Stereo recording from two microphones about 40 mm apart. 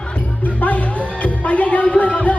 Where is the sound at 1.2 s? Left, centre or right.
Left.